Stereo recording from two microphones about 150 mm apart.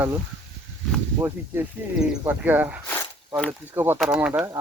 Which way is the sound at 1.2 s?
20° right (ahead or behind).